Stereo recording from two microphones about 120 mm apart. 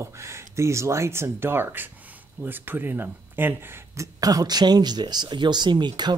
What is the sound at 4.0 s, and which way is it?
Speech, 30° right (ahead or behind).